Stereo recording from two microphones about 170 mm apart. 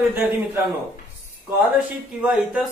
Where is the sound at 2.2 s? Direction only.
10° right (ahead or behind).